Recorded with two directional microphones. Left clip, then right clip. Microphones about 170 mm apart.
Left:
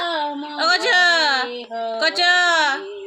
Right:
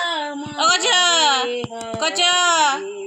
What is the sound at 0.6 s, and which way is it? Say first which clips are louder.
Whimper: even; 10° left (ahead or behind).